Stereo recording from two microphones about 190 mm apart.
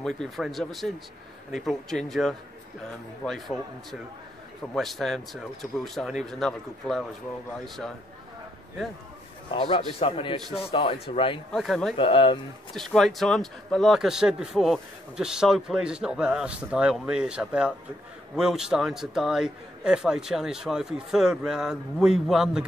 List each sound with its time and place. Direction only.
0.0 s speech: centre (ahead or behind)
9.5 s a man's voice: 25° left (ahead or behind)
11.5 s speech: centre (ahead or behind)
12.0 s a man's voice: 25° left (ahead or behind)
12.7 s speech: centre (ahead or behind)